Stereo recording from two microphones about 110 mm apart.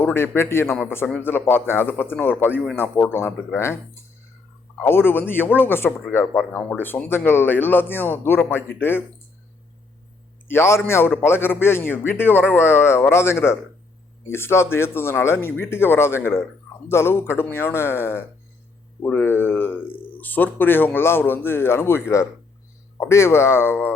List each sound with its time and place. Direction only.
0.0 s a man's voice: 20° left (ahead or behind)
4.8 s a man's voice: 20° left (ahead or behind)
10.5 s a man's voice: 25° left (ahead or behind)